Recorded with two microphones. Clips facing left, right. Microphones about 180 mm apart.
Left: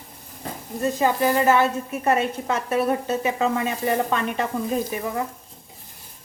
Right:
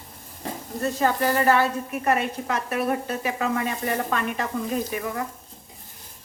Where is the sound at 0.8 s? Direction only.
15° left (ahead or behind).